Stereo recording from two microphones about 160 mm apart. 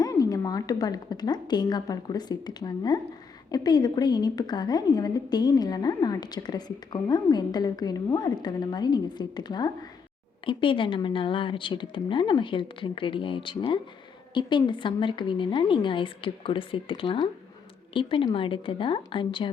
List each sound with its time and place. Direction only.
0.0 s a woman's voice: 20° left (ahead or behind)